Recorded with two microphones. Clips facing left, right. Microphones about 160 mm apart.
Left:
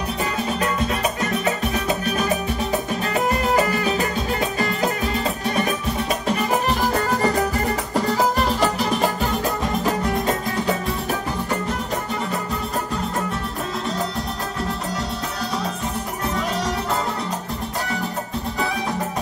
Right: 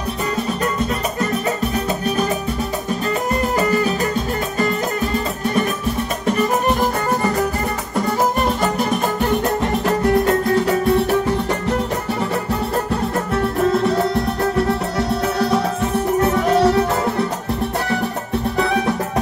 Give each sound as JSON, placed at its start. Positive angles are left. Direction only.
{"t": 8.5, "sound": "music", "side_deg": -50}
{"t": 9.6, "sound": "music", "side_deg": -70}
{"t": 16.5, "sound": "music", "side_deg": -65}